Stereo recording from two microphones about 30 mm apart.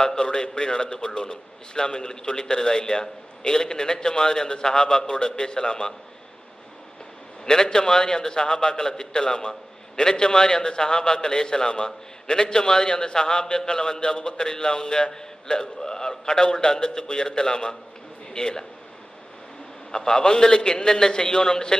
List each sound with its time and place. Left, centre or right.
0.0 s a man's voice: left
7.4 s a man's voice: left
19.9 s a man's voice: left